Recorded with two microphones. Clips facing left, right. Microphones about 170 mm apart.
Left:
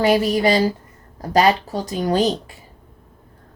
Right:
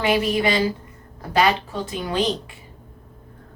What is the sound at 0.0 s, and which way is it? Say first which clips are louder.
Speech: left 4 dB; 40° left (ahead or behind).